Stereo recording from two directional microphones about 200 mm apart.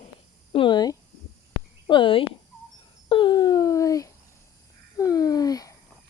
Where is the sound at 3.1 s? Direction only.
25° left (ahead or behind).